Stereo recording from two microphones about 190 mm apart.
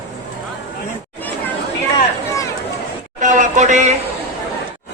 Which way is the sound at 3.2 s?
40° right (ahead or behind).